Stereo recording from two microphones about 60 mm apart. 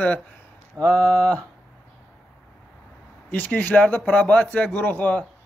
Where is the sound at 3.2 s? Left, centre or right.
Left.